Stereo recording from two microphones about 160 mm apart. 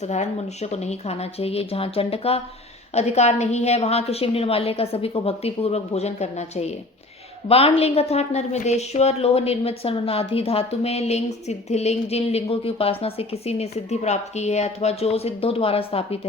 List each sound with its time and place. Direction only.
0.0 s a woman's voice: 45° left (ahead or behind)